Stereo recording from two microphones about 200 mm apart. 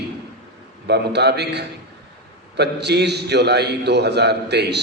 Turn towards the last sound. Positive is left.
turn(degrees=-55)  # may be behind; listen again after turning